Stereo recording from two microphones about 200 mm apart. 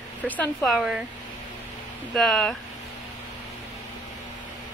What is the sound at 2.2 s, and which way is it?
Speech, centre (ahead or behind).